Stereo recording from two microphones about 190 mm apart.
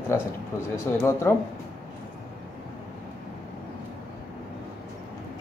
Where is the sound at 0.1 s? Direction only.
15° left (ahead or behind).